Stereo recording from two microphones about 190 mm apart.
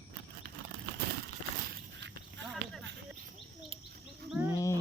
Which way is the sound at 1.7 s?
70° right (ahead or behind).